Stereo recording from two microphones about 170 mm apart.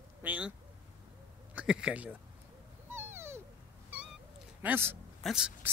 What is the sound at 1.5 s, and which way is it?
Speech, 5° right (ahead or behind).